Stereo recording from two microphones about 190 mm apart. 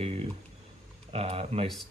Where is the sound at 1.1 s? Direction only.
30° right (ahead or behind).